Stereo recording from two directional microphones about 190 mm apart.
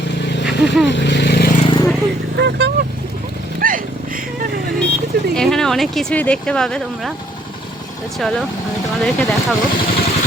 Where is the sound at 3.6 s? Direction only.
45° right (ahead or behind).